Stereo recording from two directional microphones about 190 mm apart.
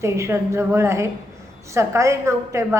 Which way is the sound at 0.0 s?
15° right (ahead or behind).